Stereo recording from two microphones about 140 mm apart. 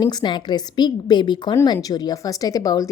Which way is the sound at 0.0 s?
30° left (ahead or behind).